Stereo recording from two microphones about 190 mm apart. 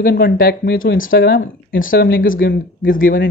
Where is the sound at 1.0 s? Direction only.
50° left (ahead or behind).